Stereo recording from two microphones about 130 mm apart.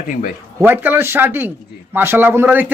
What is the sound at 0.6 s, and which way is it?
Speech, 15° right (ahead or behind).